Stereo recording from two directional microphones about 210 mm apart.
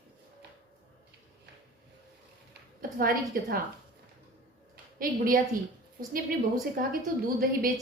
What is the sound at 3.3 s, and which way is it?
Speech, 45° right (ahead or behind).